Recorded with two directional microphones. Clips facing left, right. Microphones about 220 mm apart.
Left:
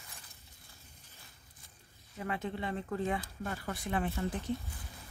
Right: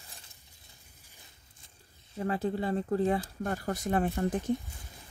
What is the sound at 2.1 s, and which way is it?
Speech, 35° right (ahead or behind).